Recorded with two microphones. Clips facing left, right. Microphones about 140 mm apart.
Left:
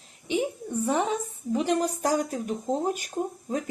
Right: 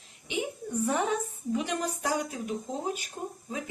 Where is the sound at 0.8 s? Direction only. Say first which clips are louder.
Left 3 dB; 25° left (ahead or behind).